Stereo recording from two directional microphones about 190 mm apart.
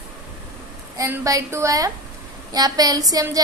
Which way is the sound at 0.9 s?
15° right (ahead or behind).